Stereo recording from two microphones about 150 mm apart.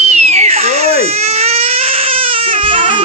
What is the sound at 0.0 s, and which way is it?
Crying, 45° right (ahead or behind).